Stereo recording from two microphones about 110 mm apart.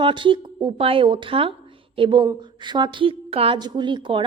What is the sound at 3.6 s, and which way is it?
Speech, 45° right (ahead or behind).